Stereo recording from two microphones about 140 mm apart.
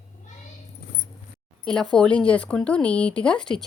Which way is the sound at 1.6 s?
5° left (ahead or behind).